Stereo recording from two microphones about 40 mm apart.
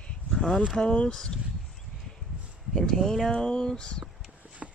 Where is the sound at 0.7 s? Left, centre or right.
Centre.